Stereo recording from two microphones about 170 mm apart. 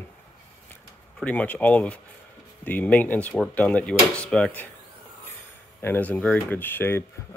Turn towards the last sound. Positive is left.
turn(degrees=10)  # may be behind; listen again after turning